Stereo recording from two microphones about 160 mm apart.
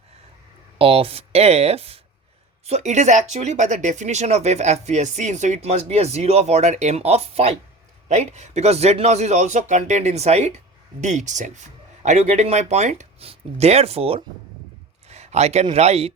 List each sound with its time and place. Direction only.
0.8 s speech: 35° right (ahead or behind)
15.1 s a sound: 40° right (ahead or behind)
15.7 s speech: 40° right (ahead or behind)